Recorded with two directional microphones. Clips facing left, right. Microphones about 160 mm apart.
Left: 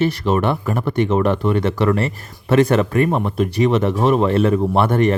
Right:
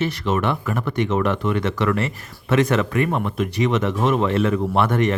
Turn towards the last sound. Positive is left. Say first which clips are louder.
# left 3 dB
turn(degrees=35)  # may be behind; listen again after turning